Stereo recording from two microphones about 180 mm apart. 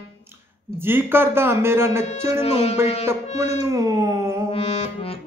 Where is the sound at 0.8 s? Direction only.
10° right (ahead or behind).